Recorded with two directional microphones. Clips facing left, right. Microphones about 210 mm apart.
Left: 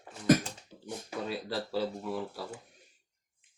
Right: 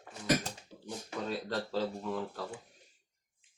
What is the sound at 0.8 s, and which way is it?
Speech, 10° left (ahead or behind).